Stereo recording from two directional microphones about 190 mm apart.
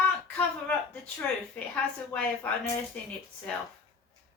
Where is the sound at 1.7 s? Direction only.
10° left (ahead or behind).